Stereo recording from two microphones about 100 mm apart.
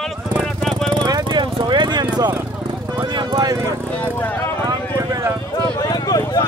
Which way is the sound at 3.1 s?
40° right (ahead or behind).